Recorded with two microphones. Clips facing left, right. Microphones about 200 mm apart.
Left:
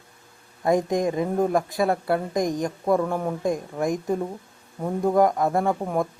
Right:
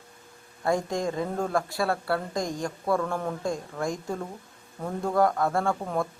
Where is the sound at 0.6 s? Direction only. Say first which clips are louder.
Left 5 dB; 20° left (ahead or behind).